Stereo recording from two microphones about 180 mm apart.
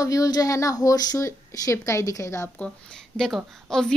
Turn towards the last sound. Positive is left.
turn(degrees=0)  # may be behind; listen again after turning